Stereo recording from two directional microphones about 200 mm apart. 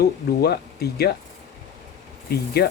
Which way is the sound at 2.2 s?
50° left (ahead or behind).